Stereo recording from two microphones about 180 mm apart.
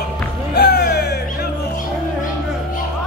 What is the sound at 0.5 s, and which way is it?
Music, 60° left (ahead or behind).